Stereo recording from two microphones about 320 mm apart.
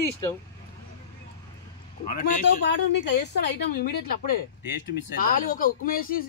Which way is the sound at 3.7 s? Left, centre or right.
Left.